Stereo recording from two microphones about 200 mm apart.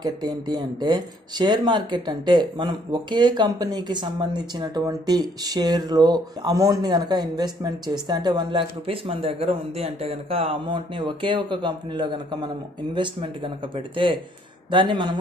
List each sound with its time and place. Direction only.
0.0 s speech: 20° right (ahead or behind)